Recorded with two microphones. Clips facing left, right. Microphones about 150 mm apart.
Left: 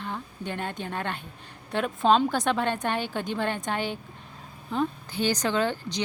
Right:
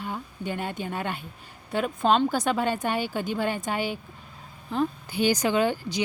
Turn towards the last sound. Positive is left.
turn(degrees=-10)  # may be behind; listen again after turning